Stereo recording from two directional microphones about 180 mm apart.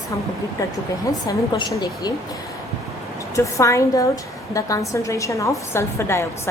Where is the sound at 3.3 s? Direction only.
15° left (ahead or behind).